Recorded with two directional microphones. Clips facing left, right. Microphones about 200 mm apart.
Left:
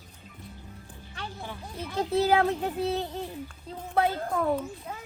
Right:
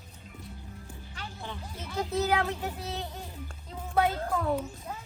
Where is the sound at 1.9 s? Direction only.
30° left (ahead or behind).